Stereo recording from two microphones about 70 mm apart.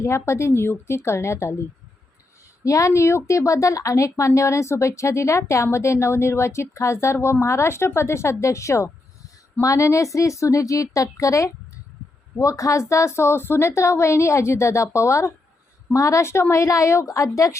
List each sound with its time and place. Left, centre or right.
0.0 s a woman's voice: left
2.6 s a woman's voice: left